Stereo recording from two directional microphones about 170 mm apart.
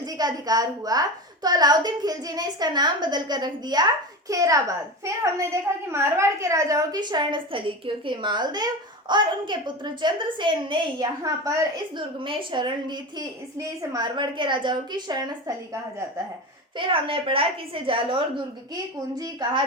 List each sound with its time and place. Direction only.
0.0 s a woman's voice: 25° right (ahead or behind)
16.7 s a woman's voice: 30° right (ahead or behind)